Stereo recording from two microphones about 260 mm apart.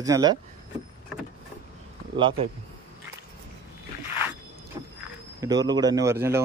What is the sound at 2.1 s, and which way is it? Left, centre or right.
Speech, centre.